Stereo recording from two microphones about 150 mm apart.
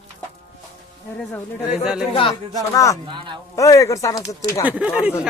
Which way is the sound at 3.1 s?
30° right (ahead or behind).